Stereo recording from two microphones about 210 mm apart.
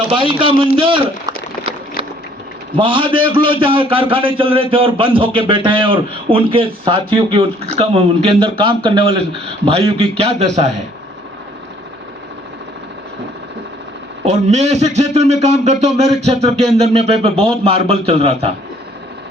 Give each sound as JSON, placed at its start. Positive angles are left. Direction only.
{"t": 0.1, "sound": "a man's voice", "side_deg": -25}
{"t": 2.7, "sound": "a man's voice", "side_deg": -25}
{"t": 14.3, "sound": "a man's voice", "side_deg": -35}